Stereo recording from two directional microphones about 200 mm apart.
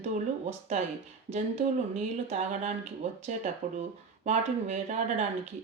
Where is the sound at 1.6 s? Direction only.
35° right (ahead or behind).